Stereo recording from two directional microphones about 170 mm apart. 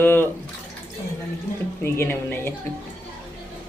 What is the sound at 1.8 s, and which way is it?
Speech, 10° left (ahead or behind).